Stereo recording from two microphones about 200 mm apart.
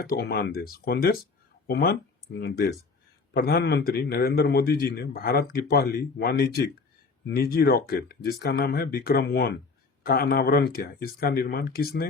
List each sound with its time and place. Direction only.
0.0 s a man's voice: 55° left (ahead or behind)